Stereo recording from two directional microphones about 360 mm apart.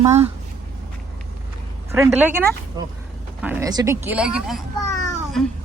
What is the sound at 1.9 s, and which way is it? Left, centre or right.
Speech, centre.